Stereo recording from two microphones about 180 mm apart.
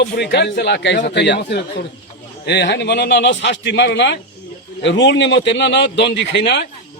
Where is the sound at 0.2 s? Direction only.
70° left (ahead or behind).